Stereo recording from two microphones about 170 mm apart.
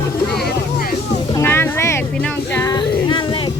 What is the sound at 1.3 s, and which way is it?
Music, 15° left (ahead or behind).